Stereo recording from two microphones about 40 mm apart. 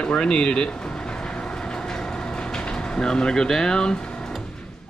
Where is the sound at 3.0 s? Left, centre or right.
Left.